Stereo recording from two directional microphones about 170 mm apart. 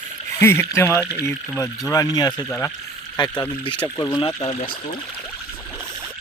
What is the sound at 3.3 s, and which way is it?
Speech, 10° left (ahead or behind).